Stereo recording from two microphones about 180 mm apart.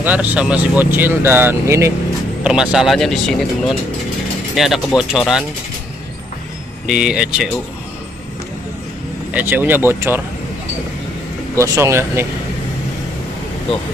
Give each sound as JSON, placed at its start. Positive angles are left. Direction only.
{"t": 0.0, "sound": "speech", "side_deg": -10}
{"t": 6.9, "sound": "speech", "side_deg": -5}
{"t": 9.3, "sound": "speech", "side_deg": -10}
{"t": 11.5, "sound": "speech", "side_deg": -15}